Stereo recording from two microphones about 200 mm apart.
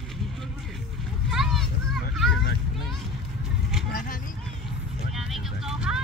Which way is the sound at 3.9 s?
40° left (ahead or behind).